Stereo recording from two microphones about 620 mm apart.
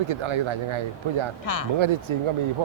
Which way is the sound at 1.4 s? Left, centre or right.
Left.